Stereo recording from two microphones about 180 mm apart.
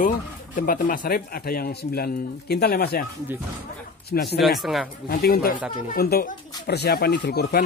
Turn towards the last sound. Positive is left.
turn(degrees=60)  # may be behind; listen again after turning